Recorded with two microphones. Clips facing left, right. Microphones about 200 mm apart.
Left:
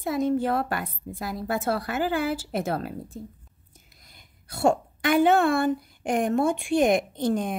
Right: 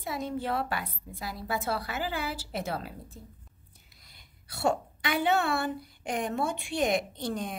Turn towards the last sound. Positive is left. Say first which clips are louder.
# left 8 dB
turn(degrees=50)  # may be behind; listen again after turning